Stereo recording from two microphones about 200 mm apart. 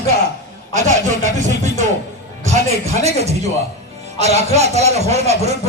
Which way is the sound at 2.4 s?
35° right (ahead or behind).